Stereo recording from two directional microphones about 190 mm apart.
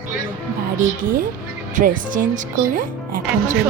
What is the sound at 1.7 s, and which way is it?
Speech, 45° right (ahead or behind).